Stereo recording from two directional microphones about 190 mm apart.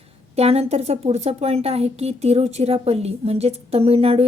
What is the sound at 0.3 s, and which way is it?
A woman's voice, 30° right (ahead or behind).